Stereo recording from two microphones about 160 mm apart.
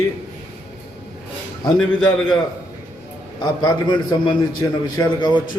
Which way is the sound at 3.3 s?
25° left (ahead or behind).